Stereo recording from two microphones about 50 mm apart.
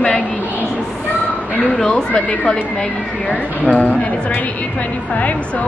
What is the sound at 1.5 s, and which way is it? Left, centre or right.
A woman's voice, left.